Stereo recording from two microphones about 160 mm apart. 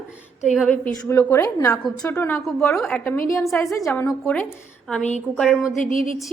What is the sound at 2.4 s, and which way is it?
A woman's voice, centre (ahead or behind).